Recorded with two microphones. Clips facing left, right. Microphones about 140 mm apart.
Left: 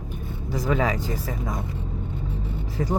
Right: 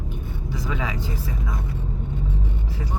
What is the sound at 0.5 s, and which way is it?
Speech, 45° left (ahead or behind).